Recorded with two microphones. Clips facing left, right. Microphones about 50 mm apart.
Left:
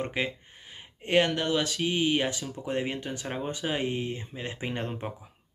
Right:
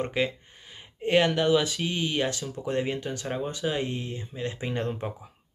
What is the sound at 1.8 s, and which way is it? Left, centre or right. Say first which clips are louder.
Speech: left 2 dB; centre.